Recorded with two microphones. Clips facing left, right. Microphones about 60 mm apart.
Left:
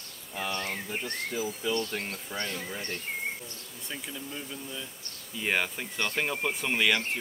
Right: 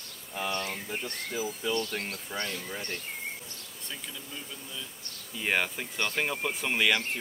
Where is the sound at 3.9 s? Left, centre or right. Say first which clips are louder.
Left 3 dB; centre.